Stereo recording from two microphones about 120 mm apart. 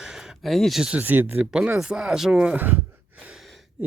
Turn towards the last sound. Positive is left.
turn(degrees=-5)  # may be behind; listen again after turning